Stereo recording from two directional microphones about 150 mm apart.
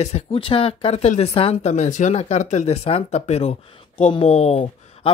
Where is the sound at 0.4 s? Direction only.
40° left (ahead or behind).